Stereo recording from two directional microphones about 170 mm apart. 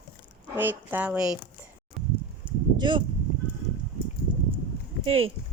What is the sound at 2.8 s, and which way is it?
Speech, 25° right (ahead or behind).